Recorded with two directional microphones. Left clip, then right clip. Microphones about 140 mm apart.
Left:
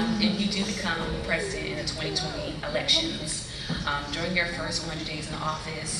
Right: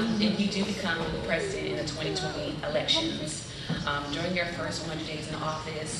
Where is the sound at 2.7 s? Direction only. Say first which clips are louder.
Left 3 dB; 5° right (ahead or behind).